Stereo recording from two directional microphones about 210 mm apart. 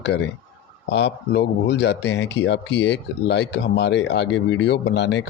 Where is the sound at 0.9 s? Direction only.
55° left (ahead or behind).